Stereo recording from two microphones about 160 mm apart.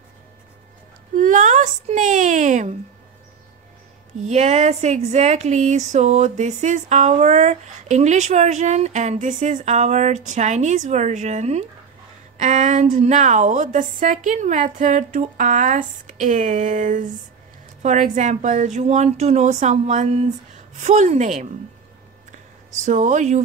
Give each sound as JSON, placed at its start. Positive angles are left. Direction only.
{"t": 1.1, "sound": "a woman's voice", "side_deg": -50}
{"t": 4.2, "sound": "speech", "side_deg": -45}
{"t": 22.8, "sound": "speech", "side_deg": -50}